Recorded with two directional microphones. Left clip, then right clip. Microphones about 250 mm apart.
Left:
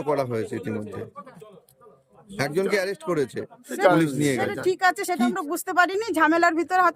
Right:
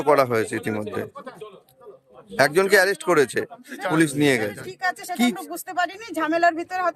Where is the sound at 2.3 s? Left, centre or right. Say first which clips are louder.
Right 7 dB; centre.